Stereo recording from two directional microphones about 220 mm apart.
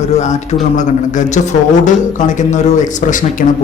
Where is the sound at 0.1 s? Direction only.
30° left (ahead or behind).